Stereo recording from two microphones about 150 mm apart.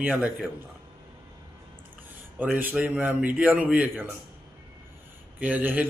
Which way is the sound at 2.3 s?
10° right (ahead or behind).